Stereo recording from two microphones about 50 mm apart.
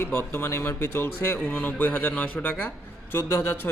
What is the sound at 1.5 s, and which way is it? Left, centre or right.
Speech, left.